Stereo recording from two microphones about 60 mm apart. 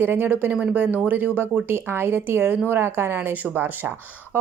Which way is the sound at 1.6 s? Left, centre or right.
Right.